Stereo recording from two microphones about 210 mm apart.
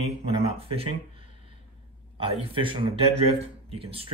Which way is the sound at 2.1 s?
25° right (ahead or behind).